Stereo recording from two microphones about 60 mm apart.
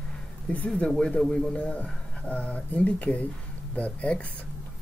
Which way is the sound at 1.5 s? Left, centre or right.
Left.